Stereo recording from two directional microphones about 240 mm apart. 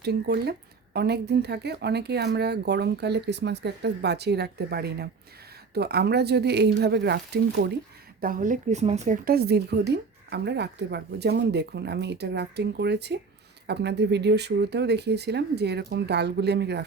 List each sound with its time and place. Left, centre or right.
0.0 s a woman's voice: right